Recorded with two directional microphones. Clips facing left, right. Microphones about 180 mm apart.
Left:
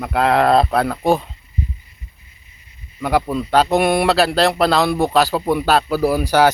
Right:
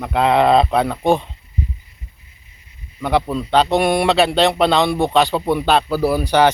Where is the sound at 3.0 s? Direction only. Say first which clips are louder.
Even; 5° left (ahead or behind).